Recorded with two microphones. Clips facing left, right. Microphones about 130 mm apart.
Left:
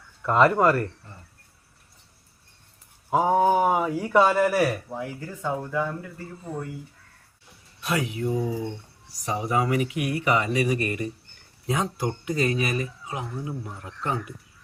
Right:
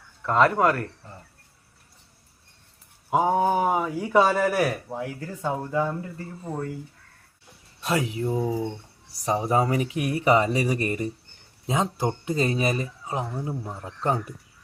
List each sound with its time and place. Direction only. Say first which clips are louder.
0.2 s speech: left 1 dB; 5° left (ahead or behind)
3.2 s speech: left 1 dB; 5° left (ahead or behind)
4.9 s speech: right 1 dB; 25° right (ahead or behind)
7.8 s speech: right 1 dB; 30° right (ahead or behind)